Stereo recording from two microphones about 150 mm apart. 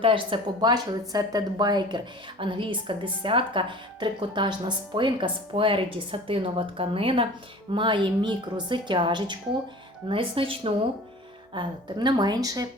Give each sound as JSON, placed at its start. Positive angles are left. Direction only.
{"t": 0.0, "sound": "speech", "side_deg": -35}